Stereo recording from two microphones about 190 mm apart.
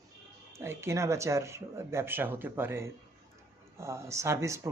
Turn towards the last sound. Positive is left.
turn(degrees=-15)  # may be behind; listen again after turning